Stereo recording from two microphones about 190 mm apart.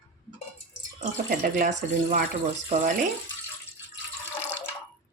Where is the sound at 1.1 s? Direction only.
40° right (ahead or behind).